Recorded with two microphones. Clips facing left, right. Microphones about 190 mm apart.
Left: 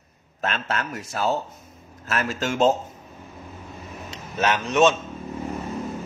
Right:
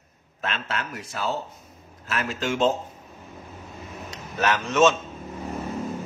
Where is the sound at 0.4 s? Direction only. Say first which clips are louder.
Left 3 dB; 45° left (ahead or behind).